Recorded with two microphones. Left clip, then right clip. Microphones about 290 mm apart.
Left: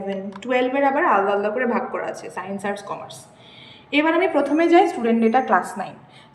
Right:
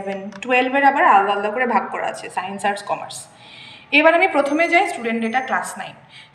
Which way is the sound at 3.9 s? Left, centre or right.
Centre.